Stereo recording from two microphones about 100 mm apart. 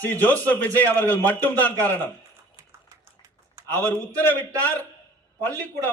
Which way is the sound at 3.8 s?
15° left (ahead or behind).